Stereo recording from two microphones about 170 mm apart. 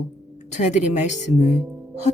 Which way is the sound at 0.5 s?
45° left (ahead or behind).